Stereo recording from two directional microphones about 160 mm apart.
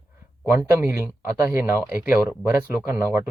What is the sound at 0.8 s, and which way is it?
Speech, 15° right (ahead or behind).